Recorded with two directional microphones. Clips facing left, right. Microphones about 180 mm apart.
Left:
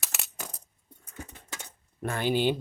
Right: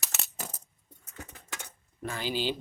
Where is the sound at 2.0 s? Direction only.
55° left (ahead or behind).